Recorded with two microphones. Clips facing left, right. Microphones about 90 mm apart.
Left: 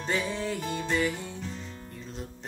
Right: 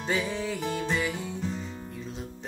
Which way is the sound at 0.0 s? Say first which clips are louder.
Right 1 dB; 5° right (ahead or behind).